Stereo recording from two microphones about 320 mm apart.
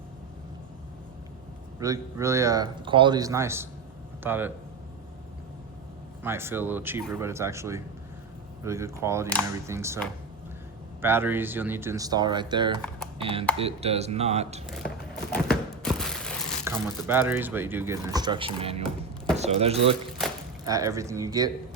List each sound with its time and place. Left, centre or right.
1.8 s a man's voice: centre
6.2 s a man's voice: centre
11.0 s a man's voice: centre
14.7 s a sound: centre
19.4 s a man's voice: centre